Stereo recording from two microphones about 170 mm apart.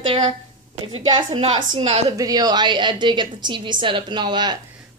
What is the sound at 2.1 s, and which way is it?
A woman's voice, 20° right (ahead or behind).